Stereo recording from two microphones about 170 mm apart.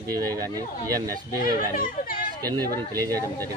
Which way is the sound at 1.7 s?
55° left (ahead or behind).